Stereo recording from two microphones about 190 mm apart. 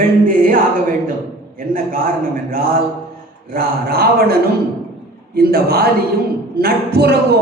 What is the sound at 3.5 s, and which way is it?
A man's voice, 55° right (ahead or behind).